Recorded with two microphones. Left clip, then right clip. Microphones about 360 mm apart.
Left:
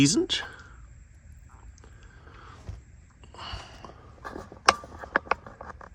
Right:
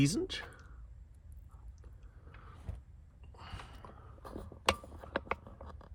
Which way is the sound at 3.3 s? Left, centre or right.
Left.